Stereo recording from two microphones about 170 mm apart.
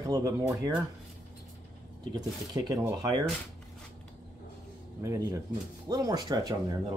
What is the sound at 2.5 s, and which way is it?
Speech, 20° right (ahead or behind).